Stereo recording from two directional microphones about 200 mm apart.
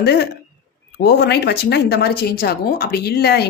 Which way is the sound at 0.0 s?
55° left (ahead or behind).